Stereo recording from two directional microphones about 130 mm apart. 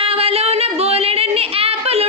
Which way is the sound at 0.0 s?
50° right (ahead or behind).